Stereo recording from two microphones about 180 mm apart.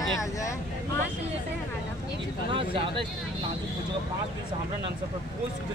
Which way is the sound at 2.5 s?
30° right (ahead or behind).